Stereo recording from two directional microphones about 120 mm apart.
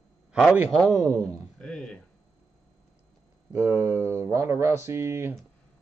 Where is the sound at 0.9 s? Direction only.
25° right (ahead or behind).